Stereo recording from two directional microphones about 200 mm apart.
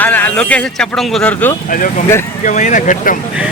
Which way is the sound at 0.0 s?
10° left (ahead or behind).